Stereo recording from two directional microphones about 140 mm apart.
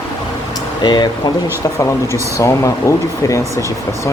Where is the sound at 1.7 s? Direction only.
20° left (ahead or behind).